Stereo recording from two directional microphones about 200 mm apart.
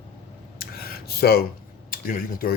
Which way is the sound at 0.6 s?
50° left (ahead or behind).